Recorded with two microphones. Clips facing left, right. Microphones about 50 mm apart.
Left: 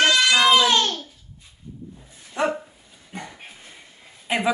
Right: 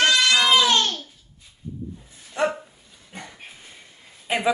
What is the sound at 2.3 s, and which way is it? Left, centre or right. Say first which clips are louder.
Dog: even; centre.